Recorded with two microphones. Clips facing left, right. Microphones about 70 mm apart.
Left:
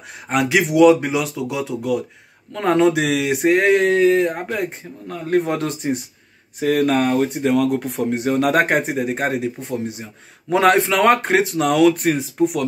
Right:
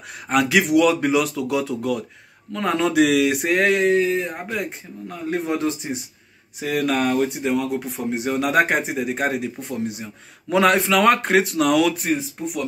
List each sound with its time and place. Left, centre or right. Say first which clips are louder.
0.3 s speech: even; left
2.5 s speech: left 4 dB; left
3.8 s speech: left 4 dB; left
4.3 s speech: left 4 dB; left
6.6 s speech: left 4 dB; left
7.4 s speech: left 5 dB; left
8.0 s speech: left 4 dB; left